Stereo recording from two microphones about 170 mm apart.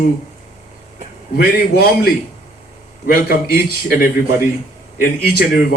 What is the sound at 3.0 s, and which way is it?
Speech, 60° left (ahead or behind).